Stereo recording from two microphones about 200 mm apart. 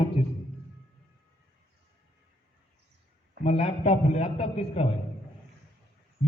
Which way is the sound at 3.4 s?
30° left (ahead or behind).